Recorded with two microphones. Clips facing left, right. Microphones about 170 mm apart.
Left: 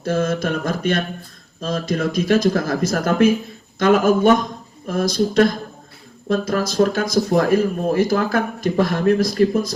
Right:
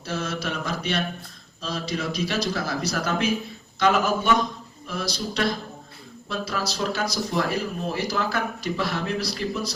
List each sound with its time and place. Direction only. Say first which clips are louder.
0.0 s speech: left 9 dB; 50° left (ahead or behind)